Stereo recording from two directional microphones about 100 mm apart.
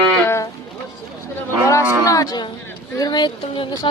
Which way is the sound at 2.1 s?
35° left (ahead or behind).